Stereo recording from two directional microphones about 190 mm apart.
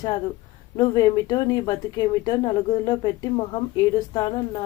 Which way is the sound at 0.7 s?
20° left (ahead or behind).